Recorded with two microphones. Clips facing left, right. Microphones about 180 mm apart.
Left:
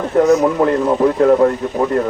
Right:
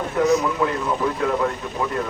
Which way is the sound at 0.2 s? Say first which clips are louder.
Left 7 dB; 50° left (ahead or behind).